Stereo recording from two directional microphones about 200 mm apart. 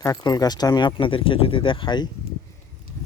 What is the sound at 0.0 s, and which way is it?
Speech, 20° left (ahead or behind).